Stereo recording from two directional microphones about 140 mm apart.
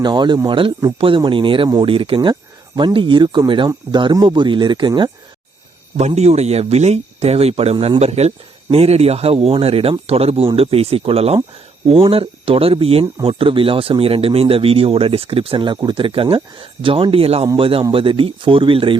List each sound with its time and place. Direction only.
0.0 s speech: 30° right (ahead or behind)
6.0 s speech: 50° right (ahead or behind)